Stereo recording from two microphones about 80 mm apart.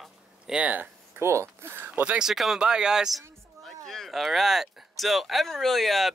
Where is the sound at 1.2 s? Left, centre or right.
Right.